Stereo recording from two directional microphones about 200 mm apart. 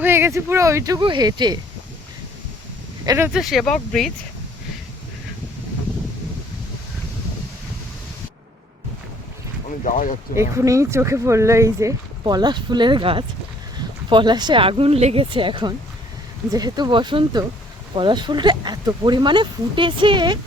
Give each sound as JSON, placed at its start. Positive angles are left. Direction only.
{"t": 0.0, "sound": "speech", "side_deg": -10}
{"t": 3.1, "sound": "speech", "side_deg": -10}
{"t": 9.8, "sound": "speech", "side_deg": 40}
{"t": 10.5, "sound": "speech", "side_deg": -15}